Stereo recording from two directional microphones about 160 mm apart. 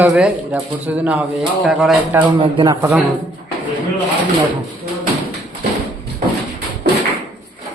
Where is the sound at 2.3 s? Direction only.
25° right (ahead or behind).